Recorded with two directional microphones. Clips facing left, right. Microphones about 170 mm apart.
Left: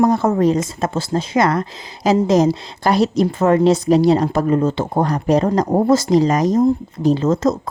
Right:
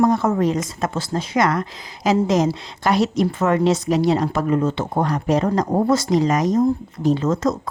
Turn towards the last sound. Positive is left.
turn(degrees=25)  # may be behind; listen again after turning